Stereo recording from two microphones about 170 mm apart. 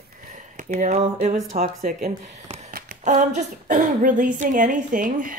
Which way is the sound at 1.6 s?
60° right (ahead or behind).